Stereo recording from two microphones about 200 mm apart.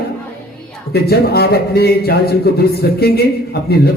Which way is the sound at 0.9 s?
50° left (ahead or behind).